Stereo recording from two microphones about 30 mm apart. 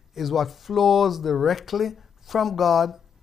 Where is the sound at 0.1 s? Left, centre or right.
Centre.